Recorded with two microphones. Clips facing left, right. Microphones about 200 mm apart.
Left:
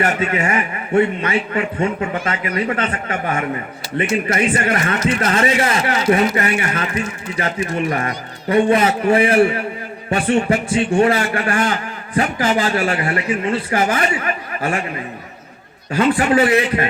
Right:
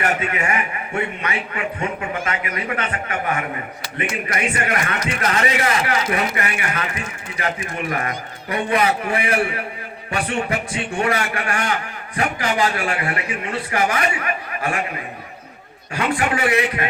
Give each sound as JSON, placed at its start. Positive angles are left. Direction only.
{"t": 0.0, "sound": "a man's voice", "side_deg": 30}
{"t": 15.9, "sound": "a man's voice", "side_deg": 35}